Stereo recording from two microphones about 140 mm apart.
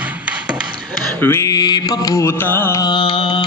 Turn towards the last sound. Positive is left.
turn(degrees=40)  # may be behind; listen again after turning